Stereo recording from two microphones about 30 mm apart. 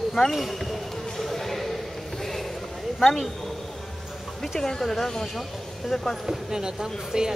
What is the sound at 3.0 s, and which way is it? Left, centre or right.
Speech, centre.